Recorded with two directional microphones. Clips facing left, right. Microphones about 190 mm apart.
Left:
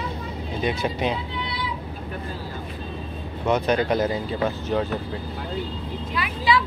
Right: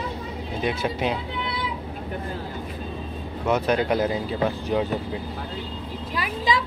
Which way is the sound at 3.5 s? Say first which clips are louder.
Left 1 dB; 5° right (ahead or behind).